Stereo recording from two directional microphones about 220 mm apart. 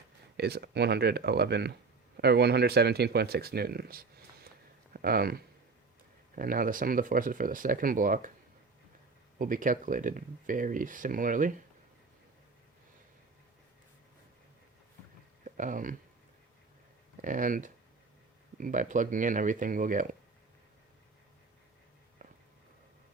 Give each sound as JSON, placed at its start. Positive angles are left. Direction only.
{"t": 0.3, "sound": "speech", "side_deg": -50}
{"t": 9.4, "sound": "speech", "side_deg": -40}
{"t": 15.4, "sound": "speech", "side_deg": -35}
{"t": 17.2, "sound": "speech", "side_deg": -35}